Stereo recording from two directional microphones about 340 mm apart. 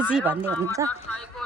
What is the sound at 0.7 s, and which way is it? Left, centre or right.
Speech, centre.